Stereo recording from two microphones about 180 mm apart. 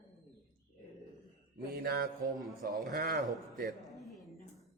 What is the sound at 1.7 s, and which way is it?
A man's voice, 60° right (ahead or behind).